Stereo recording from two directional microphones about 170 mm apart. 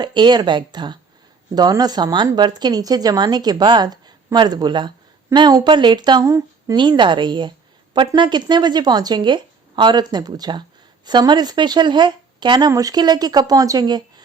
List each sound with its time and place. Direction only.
0.0 s a woman's voice: 25° right (ahead or behind)